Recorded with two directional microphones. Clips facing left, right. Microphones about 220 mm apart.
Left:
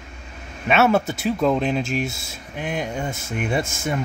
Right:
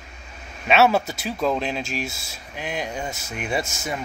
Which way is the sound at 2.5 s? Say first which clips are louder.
Left 3 dB; 50° left (ahead or behind).